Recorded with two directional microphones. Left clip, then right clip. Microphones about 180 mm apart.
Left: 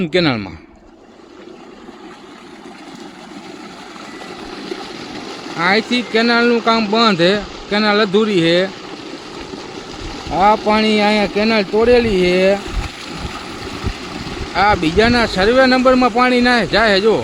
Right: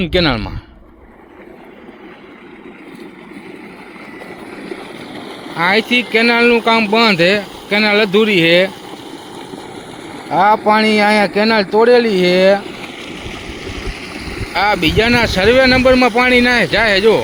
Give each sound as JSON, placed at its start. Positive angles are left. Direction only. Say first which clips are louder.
{"t": 0.0, "sound": "speech", "louder": "right 1 dB", "side_deg": 10}
{"t": 4.5, "sound": "stream", "louder": "left 1 dB", "side_deg": -25}
{"t": 5.5, "sound": "speech", "louder": "right 2 dB", "side_deg": 5}
{"t": 8.8, "sound": "vehicle", "louder": "left 1 dB", "side_deg": -60}
{"t": 10.3, "sound": "speech", "louder": "right 2 dB", "side_deg": 5}
{"t": 14.1, "sound": "boat", "louder": "right 1 dB", "side_deg": -20}
{"t": 14.5, "sound": "speech", "louder": "even", "side_deg": 0}